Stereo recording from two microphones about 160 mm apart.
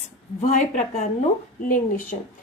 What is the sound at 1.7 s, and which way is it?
Speech, 60° left (ahead or behind).